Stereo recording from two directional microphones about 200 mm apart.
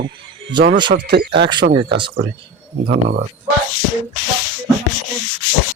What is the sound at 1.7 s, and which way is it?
Speech, 25° right (ahead or behind).